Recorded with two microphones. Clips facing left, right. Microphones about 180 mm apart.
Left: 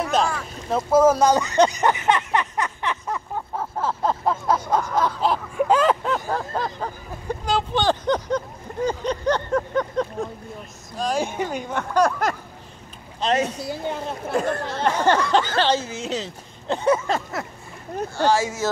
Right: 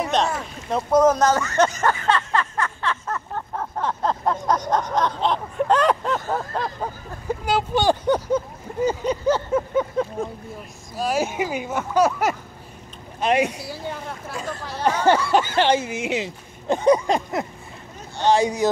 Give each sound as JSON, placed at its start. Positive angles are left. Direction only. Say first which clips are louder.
{"t": 0.0, "sound": "boat", "louder": "even", "side_deg": 0}
{"t": 0.7, "sound": "a sound", "louder": "left 1 dB", "side_deg": 5}
{"t": 11.0, "sound": "speech", "louder": "right 1 dB", "side_deg": -5}
{"t": 13.6, "sound": "speech", "louder": "left 4 dB", "side_deg": 20}
{"t": 14.3, "sound": "speech", "louder": "left 9 dB", "side_deg": 60}
{"t": 14.9, "sound": "speech", "louder": "right 1 dB", "side_deg": -10}